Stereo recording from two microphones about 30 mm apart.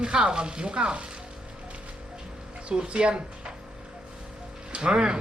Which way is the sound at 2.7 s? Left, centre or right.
Right.